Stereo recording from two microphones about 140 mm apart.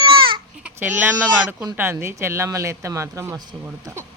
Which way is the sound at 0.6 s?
10° right (ahead or behind).